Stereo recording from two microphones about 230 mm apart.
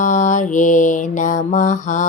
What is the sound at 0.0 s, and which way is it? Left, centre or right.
A woman's voice, left.